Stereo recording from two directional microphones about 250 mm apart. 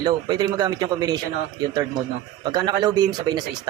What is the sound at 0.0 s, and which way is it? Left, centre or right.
A man's voice, centre.